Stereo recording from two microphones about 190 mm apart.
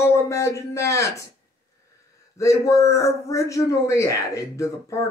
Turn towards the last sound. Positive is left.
turn(degrees=15)  # may be behind; listen again after turning